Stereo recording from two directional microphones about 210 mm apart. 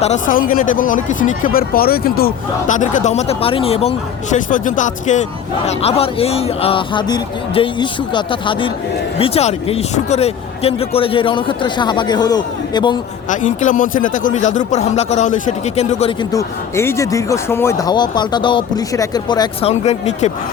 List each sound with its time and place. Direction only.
0.0 s speech: 35° left (ahead or behind); by 13.0 s 20° left (ahead or behind)
13.3 s speech: 35° left (ahead or behind)
16.3 s speech: 15° left (ahead or behind)
19.7 s speech: 30° left (ahead or behind)